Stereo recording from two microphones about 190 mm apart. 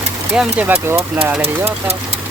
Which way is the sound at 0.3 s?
10° right (ahead or behind).